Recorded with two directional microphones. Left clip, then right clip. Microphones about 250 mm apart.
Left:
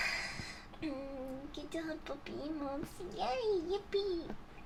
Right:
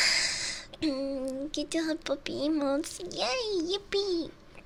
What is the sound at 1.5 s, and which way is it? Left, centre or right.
Speech, right.